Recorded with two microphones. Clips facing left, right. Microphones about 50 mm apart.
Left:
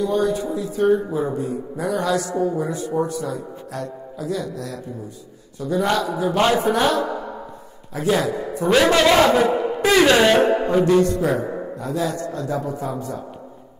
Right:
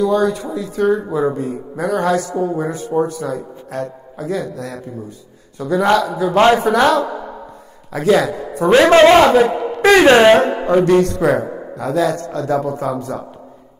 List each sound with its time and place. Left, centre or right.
0.0 s speech: right
5.6 s speech: right
6.4 s a man's voice: right
6.7 s a man's voice: right
8.9 s a man's voice: right
9.8 s a sound: right
10.0 s a man's voice: right
10.8 s a man's voice: right